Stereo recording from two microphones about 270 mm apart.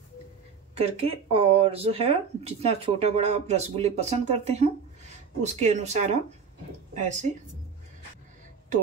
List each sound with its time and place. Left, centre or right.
0.7 s speech: right